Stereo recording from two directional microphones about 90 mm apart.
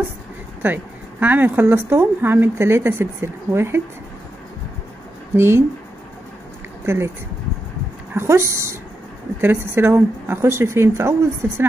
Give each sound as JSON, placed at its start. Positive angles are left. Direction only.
{"t": 0.6, "sound": "a woman's voice", "side_deg": -25}
{"t": 5.3, "sound": "speech", "side_deg": -30}
{"t": 8.1, "sound": "a woman's voice", "side_deg": -30}